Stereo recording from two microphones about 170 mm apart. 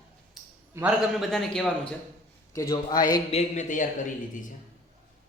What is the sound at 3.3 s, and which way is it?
Speech, 40° left (ahead or behind).